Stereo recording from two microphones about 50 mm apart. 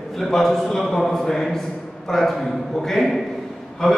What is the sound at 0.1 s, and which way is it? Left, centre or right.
A man's voice, centre.